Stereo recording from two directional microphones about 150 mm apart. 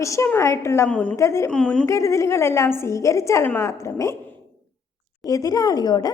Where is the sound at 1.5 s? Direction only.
5° left (ahead or behind).